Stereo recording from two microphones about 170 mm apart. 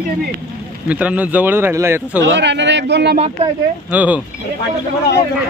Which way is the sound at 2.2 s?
90° right.